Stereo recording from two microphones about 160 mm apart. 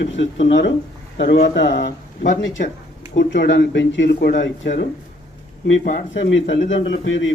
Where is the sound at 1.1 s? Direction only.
90° left.